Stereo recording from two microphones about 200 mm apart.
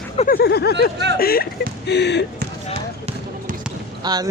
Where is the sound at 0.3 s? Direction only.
50° left (ahead or behind).